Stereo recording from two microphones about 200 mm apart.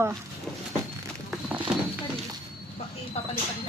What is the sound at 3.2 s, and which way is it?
Vehicle, 30° left (ahead or behind).